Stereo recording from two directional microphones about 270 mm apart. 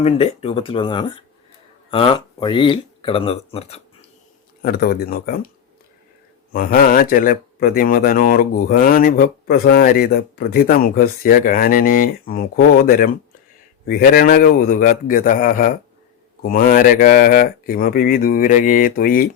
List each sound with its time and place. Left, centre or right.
0.0 s speech: left
4.6 s speech: left
6.5 s speech: left